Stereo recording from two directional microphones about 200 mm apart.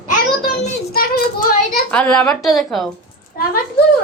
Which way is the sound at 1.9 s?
5° left (ahead or behind).